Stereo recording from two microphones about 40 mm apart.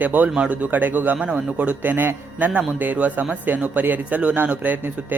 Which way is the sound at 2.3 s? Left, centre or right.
Right.